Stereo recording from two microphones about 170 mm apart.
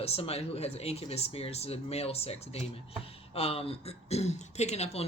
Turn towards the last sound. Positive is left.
turn(degrees=40)  # may be behind; listen again after turning